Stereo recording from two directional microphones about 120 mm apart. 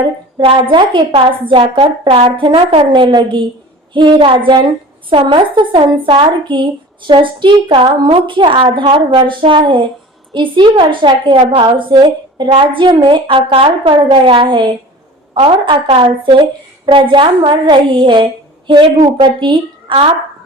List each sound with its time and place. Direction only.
0.0 s a woman's voice: 45° right (ahead or behind)